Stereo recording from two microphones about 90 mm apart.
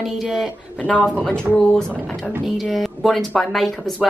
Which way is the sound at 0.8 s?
15° left (ahead or behind).